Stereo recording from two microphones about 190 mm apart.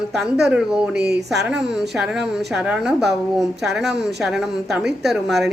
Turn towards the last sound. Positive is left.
turn(degrees=0)  # may be behind; listen again after turning